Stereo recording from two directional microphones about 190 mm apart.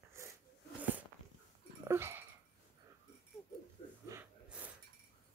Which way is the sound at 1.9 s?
10° right (ahead or behind).